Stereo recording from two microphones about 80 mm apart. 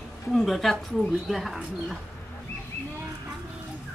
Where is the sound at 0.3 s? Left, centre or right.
Centre.